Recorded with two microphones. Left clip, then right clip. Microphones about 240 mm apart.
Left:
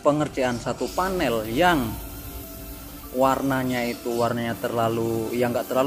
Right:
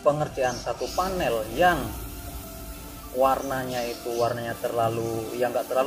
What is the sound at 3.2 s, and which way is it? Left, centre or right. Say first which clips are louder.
Speech: left 1 dB; left.